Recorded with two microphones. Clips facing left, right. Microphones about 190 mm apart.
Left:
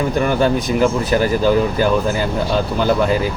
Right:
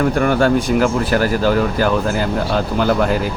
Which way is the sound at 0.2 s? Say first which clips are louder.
Left 2 dB; 5° left (ahead or behind).